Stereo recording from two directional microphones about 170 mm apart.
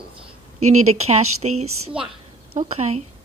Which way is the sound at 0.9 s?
40° right (ahead or behind).